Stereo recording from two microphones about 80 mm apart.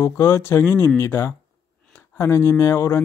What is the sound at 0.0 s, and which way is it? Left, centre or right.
Speech, left.